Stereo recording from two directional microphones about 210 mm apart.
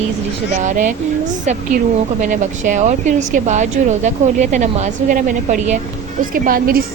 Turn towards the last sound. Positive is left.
turn(degrees=-45)  # may be behind; listen again after turning